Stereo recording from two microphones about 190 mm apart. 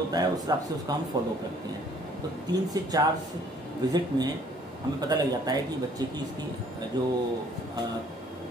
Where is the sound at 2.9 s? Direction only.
20° right (ahead or behind).